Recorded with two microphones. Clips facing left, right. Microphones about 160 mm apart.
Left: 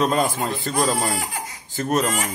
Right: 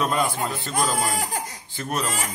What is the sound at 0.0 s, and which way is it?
A man's voice, 45° left (ahead or behind).